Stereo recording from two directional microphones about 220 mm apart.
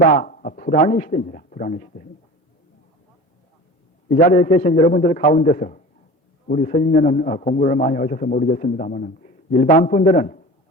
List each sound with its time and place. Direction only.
0.0 s a man's voice: 35° left (ahead or behind)
4.1 s a man's voice: 35° left (ahead or behind)